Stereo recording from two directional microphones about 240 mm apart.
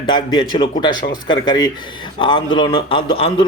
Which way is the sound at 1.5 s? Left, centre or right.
Centre.